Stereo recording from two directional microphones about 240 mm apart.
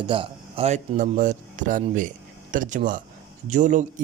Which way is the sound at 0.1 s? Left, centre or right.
Right.